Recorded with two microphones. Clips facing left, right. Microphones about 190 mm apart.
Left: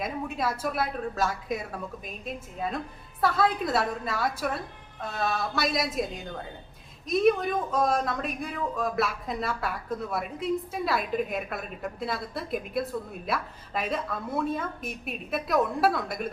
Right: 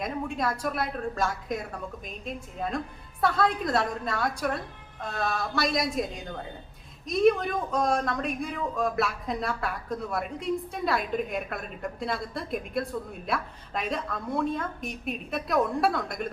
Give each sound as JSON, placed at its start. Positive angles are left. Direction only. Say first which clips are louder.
{"t": 0.0, "sound": "speech", "louder": "even", "side_deg": 5}